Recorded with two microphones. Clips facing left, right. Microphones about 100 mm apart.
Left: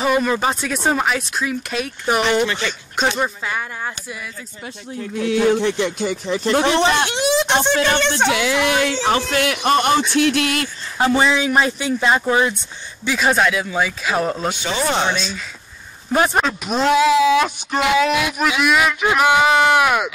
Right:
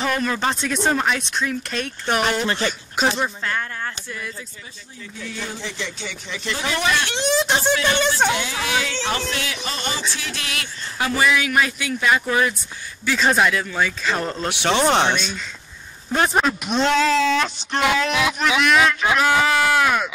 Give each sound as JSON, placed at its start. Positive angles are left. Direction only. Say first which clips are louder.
{"t": 0.0, "sound": "speech", "louder": "left 4 dB", "side_deg": 10}
{"t": 2.4, "sound": "speech", "louder": "left 1 dB", "side_deg": -35}
{"t": 3.2, "sound": "speech", "louder": "left 2 dB", "side_deg": 10}
{"t": 4.9, "sound": "speech", "louder": "left 14 dB", "side_deg": 60}
{"t": 7.2, "sound": "a sound", "louder": "left 2 dB", "side_deg": 0}
{"t": 8.3, "sound": "speech", "louder": "left 6 dB", "side_deg": 90}
{"t": 8.6, "sound": "speech", "louder": "left 6 dB", "side_deg": 55}
{"t": 11.0, "sound": "speech", "louder": "left 4 dB", "side_deg": 25}
{"t": 13.0, "sound": "speech", "louder": "left 1 dB", "side_deg": 5}
{"t": 14.5, "sound": "speech", "louder": "right 3 dB", "side_deg": -75}
{"t": 16.3, "sound": "speech", "louder": "left 1 dB", "side_deg": 0}